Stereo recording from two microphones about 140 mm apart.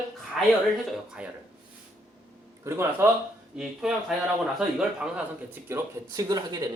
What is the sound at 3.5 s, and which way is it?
A woman's voice, 5° right (ahead or behind).